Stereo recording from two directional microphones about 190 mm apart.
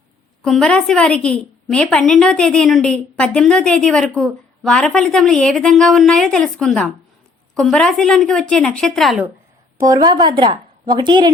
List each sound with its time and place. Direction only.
0.4 s a woman's voice: 5° left (ahead or behind)
9.8 s a woman's voice: 20° right (ahead or behind)